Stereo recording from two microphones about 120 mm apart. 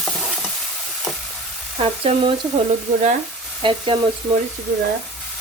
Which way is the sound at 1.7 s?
50° right (ahead or behind).